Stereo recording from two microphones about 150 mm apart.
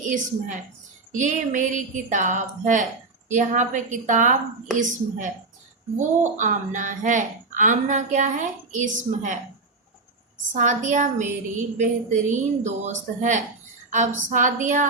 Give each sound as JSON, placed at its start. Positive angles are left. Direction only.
{"t": 0.0, "sound": "speech", "side_deg": -60}
{"t": 10.5, "sound": "speech", "side_deg": -55}